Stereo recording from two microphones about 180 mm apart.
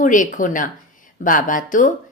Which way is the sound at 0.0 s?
45° left (ahead or behind).